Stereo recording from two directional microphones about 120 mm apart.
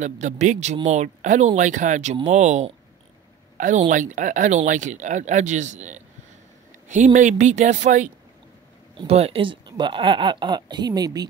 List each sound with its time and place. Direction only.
0.0 s speech: 85° right
2.2 s speech: 75° right (ahead or behind)
3.5 s a woman's voice: 90° right
9.0 s speech: 60° right (ahead or behind); by 11.2 s 35° right (ahead or behind)